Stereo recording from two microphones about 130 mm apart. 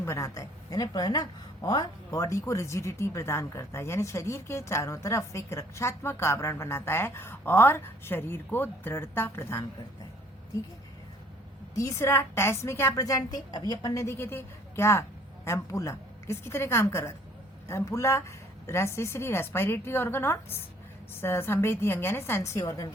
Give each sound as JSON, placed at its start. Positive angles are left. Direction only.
{"t": 0.0, "sound": "a woman's voice", "side_deg": 20}
{"t": 11.7, "sound": "a woman's voice", "side_deg": 25}